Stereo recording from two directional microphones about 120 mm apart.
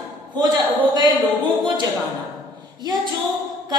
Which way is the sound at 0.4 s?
35° right (ahead or behind).